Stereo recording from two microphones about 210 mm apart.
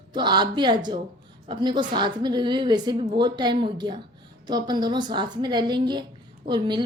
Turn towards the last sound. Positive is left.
turn(degrees=-20)  # may be behind; listen again after turning